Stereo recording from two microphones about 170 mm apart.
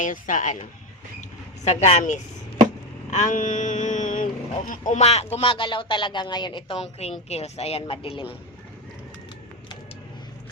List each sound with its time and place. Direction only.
0.0 s a woman's voice: 50° left (ahead or behind)
4.9 s a woman's voice: 40° left (ahead or behind)